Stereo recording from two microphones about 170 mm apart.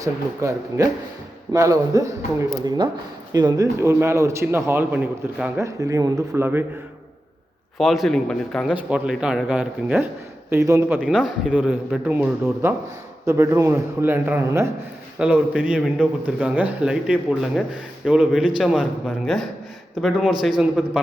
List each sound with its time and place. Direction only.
0.0 s a man's voice: 20° right (ahead or behind)
7.8 s a man's voice: centre (ahead or behind)